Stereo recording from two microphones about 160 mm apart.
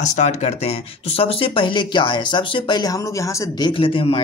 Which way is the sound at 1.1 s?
35° left (ahead or behind).